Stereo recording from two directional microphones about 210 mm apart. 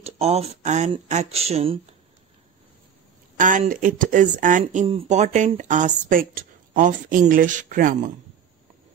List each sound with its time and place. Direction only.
0.0 s speech: 30° right (ahead or behind)
3.3 s speech: 40° right (ahead or behind)